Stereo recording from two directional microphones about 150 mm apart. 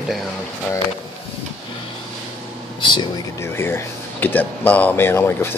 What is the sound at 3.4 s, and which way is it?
Speech, 15° left (ahead or behind).